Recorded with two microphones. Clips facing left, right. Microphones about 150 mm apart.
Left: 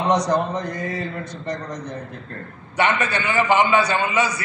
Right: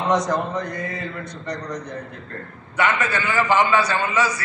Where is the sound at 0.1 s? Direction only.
70° left (ahead or behind).